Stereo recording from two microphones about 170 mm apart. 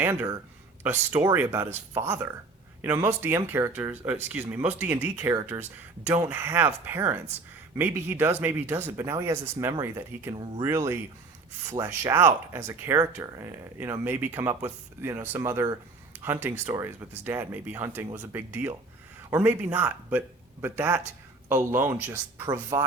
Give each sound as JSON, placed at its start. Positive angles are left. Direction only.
{"t": 0.0, "sound": "speech", "side_deg": -15}